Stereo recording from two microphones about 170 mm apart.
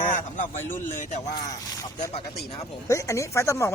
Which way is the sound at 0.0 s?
50° left (ahead or behind).